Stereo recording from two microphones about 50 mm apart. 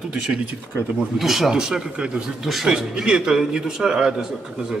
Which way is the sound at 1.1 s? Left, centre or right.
Centre.